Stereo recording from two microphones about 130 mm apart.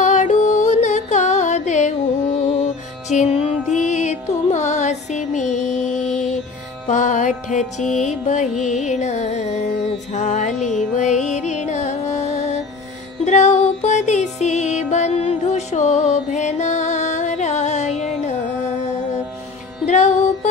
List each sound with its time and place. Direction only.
0.0 s music: 65° left (ahead or behind)
19.9 s music: 60° left (ahead or behind)